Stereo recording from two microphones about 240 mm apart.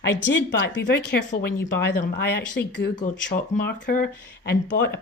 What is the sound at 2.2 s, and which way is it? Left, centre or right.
Speech, left.